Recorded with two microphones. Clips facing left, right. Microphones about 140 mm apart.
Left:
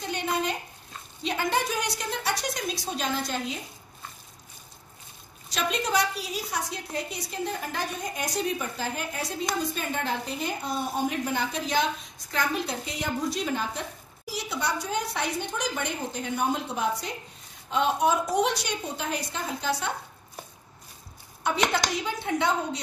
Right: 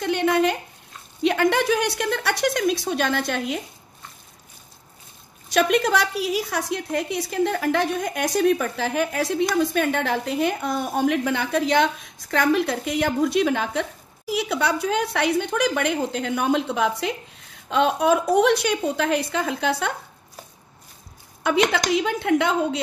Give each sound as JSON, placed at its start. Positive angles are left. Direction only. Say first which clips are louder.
{"t": 0.0, "sound": "a sound", "louder": "right 9 dB", "side_deg": -65}
{"t": 1.2, "sound": "a woman's voice", "louder": "right 8 dB", "side_deg": -65}
{"t": 5.5, "sound": "a woman's voice", "louder": "right 8 dB", "side_deg": -75}
{"t": 14.3, "sound": "a woman's voice", "louder": "right 7 dB", "side_deg": -65}
{"t": 21.4, "sound": "a woman's voice", "louder": "right 5 dB", "side_deg": -90}